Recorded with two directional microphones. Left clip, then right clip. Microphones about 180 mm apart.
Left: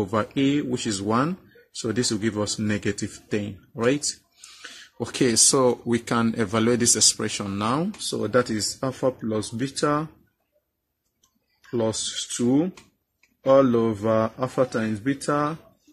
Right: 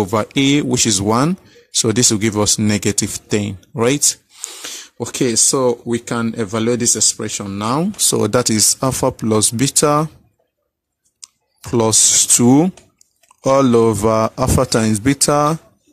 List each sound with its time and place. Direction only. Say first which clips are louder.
0.0 s speech: right 7 dB; 40° right (ahead or behind)
8.1 s speech: right 6 dB; 60° right (ahead or behind)
11.7 s speech: right 12 dB; 55° right (ahead or behind)